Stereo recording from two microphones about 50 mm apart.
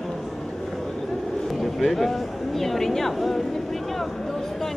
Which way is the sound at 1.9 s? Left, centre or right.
Centre.